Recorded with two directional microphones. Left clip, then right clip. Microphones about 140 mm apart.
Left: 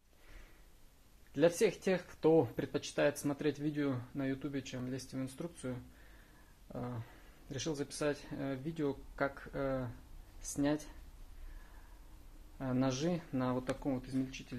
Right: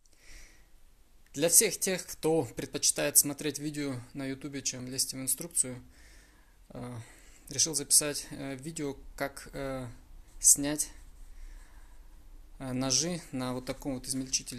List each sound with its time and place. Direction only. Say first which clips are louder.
1.3 s speech: right 2 dB; 30° right (ahead or behind)
12.5 s speech: right 5 dB; 30° right (ahead or behind)